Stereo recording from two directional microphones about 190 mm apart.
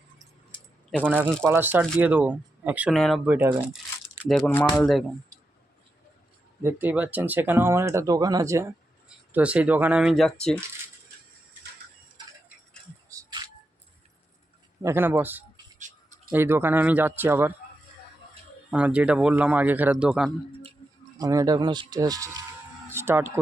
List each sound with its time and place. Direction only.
0.9 s speech: 5° right (ahead or behind)
3.2 s speech: 10° right (ahead or behind)
6.6 s speech: 10° right (ahead or behind)
9.0 s speech: 5° right (ahead or behind)
13.1 s music: 20° right (ahead or behind)
14.8 s speech: 15° right (ahead or behind)
18.7 s speech: 5° right (ahead or behind)
21.2 s speech: 20° right (ahead or behind)
22.9 s a sound: 15° right (ahead or behind)